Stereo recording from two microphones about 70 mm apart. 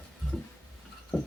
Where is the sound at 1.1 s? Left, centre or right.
Centre.